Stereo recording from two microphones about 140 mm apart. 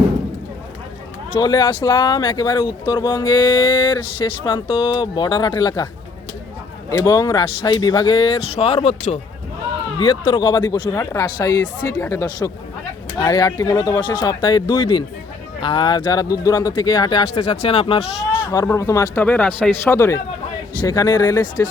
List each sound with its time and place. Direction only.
1.4 s speech: 30° left (ahead or behind)
7.0 s speech: 25° left (ahead or behind)
18.5 s speech: 20° left (ahead or behind)
19.2 s speech: 10° left (ahead or behind); by 21.7 s 30° left (ahead or behind)